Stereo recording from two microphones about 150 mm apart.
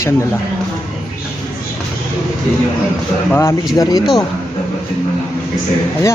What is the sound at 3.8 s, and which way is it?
Speech, 25° left (ahead or behind).